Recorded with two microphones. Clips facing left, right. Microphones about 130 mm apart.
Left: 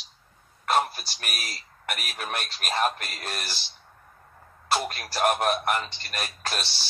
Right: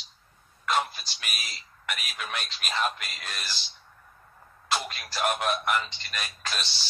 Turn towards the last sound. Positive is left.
turn(degrees=40)  # may be behind; listen again after turning